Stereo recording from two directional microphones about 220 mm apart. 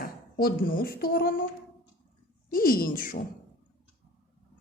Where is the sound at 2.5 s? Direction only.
40° left (ahead or behind).